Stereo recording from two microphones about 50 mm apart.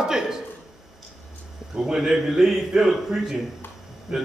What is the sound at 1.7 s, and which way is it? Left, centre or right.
A man's voice, centre.